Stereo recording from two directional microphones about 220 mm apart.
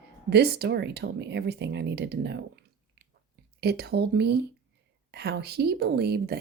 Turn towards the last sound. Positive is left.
turn(degrees=-45)  # may be behind; listen again after turning